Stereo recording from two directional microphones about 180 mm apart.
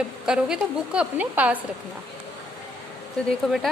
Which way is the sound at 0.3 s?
5° right (ahead or behind).